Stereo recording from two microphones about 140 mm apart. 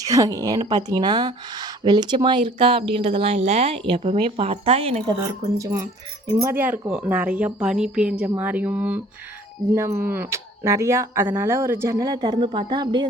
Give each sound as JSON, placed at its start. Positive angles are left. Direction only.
{"t": 0.0, "sound": "speech", "side_deg": -25}
{"t": 5.0, "sound": "a woman's voice", "side_deg": -30}